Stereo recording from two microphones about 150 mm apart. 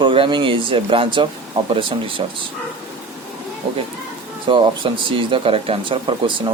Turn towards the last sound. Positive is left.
turn(degrees=-35)  # may be behind; listen again after turning